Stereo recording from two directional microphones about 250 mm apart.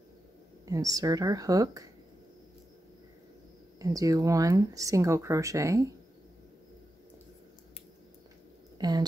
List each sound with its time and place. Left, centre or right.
0.7 s speech: centre
3.8 s speech: centre
8.7 s a sound: centre